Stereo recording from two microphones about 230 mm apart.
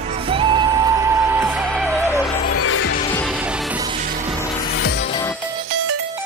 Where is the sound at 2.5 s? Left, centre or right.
Left.